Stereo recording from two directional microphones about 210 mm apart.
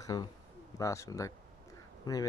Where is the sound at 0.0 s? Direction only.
15° left (ahead or behind).